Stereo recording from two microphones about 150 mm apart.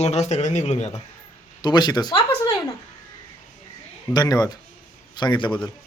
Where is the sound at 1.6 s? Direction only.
30° left (ahead or behind).